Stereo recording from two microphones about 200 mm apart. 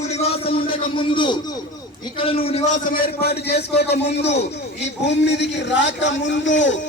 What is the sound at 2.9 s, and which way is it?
A man's voice, 50° left (ahead or behind).